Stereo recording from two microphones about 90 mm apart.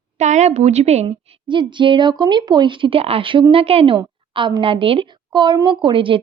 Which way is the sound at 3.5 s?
90° right.